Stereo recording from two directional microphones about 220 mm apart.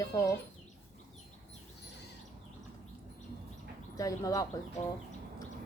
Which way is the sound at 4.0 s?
15° left (ahead or behind).